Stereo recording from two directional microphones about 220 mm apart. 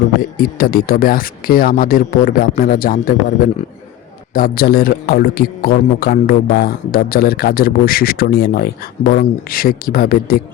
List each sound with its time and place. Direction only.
0.2 s a man's voice: 40° left (ahead or behind)
4.4 s a man's voice: 40° left (ahead or behind)